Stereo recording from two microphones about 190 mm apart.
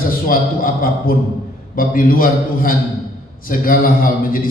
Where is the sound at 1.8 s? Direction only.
50° left (ahead or behind).